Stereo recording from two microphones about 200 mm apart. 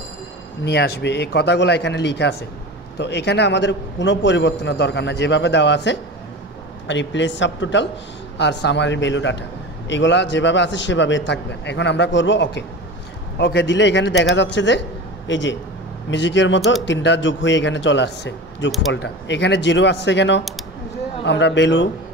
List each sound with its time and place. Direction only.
0.7 s a man's voice: 55° left (ahead or behind)